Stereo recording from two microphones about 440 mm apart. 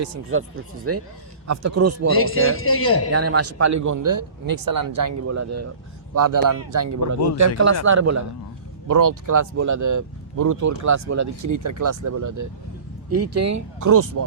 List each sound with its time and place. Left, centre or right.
0.0 s speech: right
2.1 s speech: left
3.1 s speech: right